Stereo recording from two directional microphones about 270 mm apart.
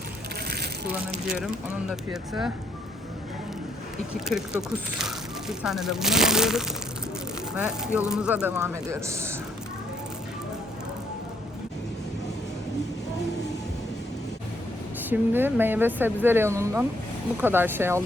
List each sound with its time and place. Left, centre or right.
0.4 s a sound: right
1.9 s speech: centre
4.1 s speech: centre
15.1 s speech: centre